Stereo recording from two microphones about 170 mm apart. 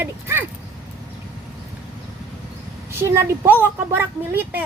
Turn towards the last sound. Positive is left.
turn(degrees=-10)  # may be behind; listen again after turning